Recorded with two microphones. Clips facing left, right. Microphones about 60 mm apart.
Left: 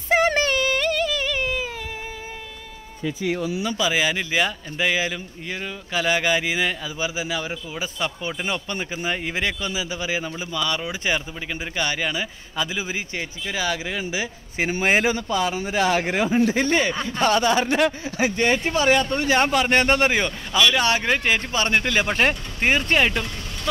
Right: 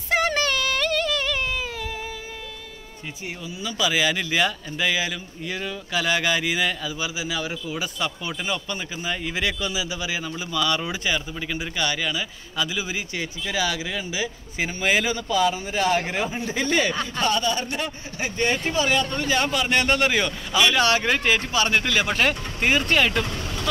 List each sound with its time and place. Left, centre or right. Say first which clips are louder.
0.3 s a sound: left 3 dB; left
3.3 s speech: left 11 dB; left
3.7 s speech: right 2 dB; left
7.0 s a man's voice: left 2 dB; left
8.5 s a man's voice: left 1 dB; left; by 10.8 s centre
10.9 s a man's voice: left 1 dB; left
15.5 s speech: left 2 dB; left
16.8 s speech: left 1 dB; centre
17.2 s speech: left 5 dB; left
18.7 s speech: left 3 dB; left
19.3 s a man's voice: left 4 dB; left
20.1 s speech: left 1 dB; left
21.5 s speech: even; left